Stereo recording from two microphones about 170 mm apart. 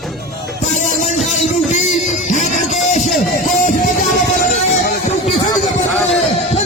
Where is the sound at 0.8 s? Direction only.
50° left (ahead or behind).